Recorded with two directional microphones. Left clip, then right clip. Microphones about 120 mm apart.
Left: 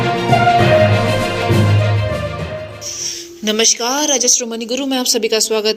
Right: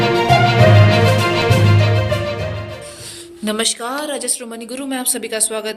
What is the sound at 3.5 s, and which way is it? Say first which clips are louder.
Speech: left 6 dB; 25° left (ahead or behind).